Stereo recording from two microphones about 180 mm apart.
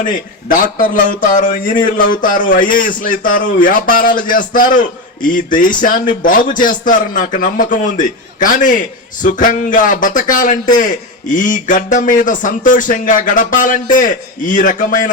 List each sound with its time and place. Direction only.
0.0 s a man's voice: 45° left (ahead or behind)